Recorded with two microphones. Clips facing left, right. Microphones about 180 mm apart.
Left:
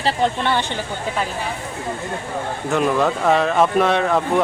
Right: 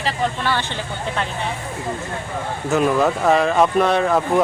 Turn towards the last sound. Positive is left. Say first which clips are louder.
# even
turn(degrees=0)  # may be behind; listen again after turning